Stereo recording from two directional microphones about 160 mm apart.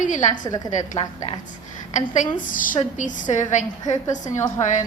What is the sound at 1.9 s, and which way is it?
A woman's voice, 50° left (ahead or behind).